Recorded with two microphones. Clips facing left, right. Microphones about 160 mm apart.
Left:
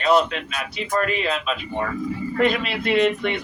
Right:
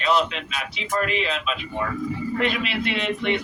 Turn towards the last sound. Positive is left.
turn(degrees=45)  # may be behind; listen again after turning